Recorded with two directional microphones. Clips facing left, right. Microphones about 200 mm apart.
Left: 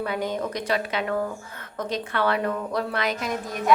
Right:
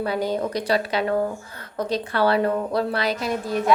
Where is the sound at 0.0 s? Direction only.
35° right (ahead or behind).